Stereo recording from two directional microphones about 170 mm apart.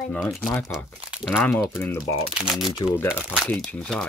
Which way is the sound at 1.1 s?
5° right (ahead or behind).